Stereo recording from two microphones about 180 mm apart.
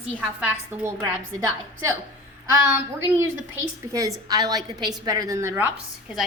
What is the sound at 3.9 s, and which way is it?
A woman's voice, 20° right (ahead or behind).